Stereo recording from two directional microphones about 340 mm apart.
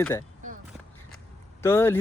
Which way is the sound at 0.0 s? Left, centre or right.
Centre.